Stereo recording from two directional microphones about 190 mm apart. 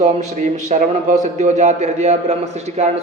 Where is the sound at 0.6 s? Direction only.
40° right (ahead or behind).